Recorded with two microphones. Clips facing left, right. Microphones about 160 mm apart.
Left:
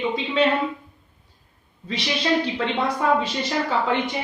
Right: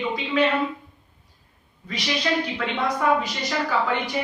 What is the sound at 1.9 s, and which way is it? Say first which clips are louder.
A woman's voice: left 2 dB; 25° left (ahead or behind).